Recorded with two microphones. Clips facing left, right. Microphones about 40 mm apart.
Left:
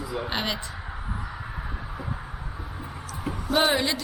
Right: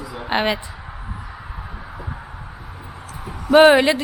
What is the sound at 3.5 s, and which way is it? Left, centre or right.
Speech, right.